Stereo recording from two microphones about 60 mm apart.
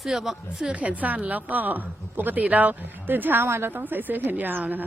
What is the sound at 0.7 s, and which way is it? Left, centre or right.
A woman's voice, right.